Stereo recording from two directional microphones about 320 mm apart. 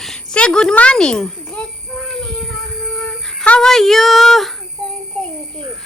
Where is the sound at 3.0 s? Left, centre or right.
Centre.